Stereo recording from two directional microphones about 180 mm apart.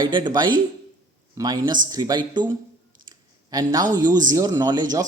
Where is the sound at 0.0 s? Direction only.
25° right (ahead or behind).